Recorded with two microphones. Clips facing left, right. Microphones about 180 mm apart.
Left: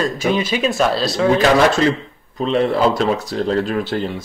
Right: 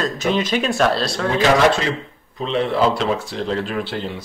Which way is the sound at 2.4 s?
40° left (ahead or behind).